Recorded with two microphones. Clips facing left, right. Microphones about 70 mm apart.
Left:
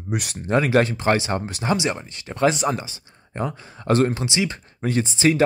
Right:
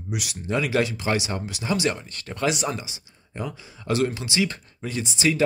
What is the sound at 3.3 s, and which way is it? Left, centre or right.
Speech, left.